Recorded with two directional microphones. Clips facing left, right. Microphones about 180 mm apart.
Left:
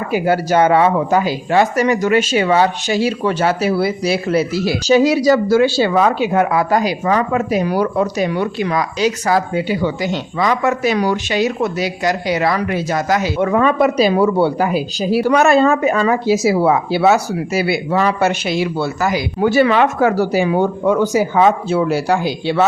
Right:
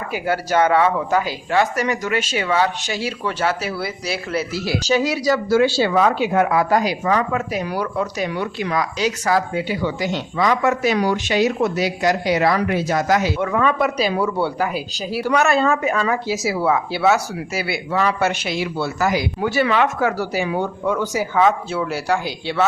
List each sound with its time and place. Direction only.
0.1 s speech: 20° left (ahead or behind)
10.9 s speech: 45° left (ahead or behind)
11.3 s speech: 20° left (ahead or behind)
13.5 s speech: 35° left (ahead or behind)
14.1 s speech: 40° left (ahead or behind)